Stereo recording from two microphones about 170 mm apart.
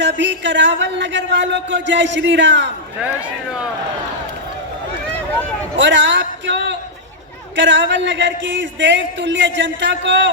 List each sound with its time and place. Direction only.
0.0 s speech: 90° right
5.7 s speech: 90° right